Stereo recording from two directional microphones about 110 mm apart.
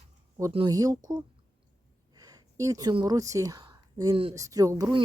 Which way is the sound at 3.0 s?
35° right (ahead or behind).